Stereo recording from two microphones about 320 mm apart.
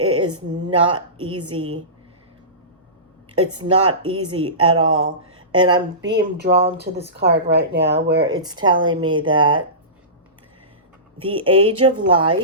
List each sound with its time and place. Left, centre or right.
0.2 s a woman's voice: centre
3.6 s a woman's voice: centre
6.1 s speech: right
8.2 s speech: centre
11.2 s speech: centre